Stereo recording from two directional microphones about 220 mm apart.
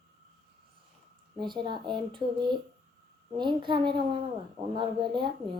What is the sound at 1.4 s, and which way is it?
Speech, 20° right (ahead or behind).